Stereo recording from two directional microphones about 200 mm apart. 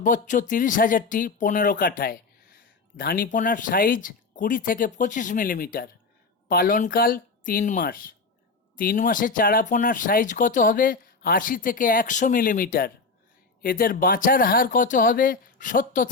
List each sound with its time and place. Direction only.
0.0 s speech: 40° left (ahead or behind)